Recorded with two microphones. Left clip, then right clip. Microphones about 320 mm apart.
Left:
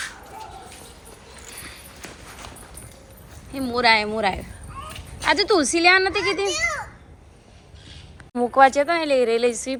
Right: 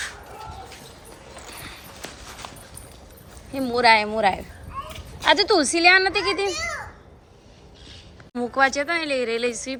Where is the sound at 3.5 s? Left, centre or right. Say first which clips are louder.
Right 1 dB; centre.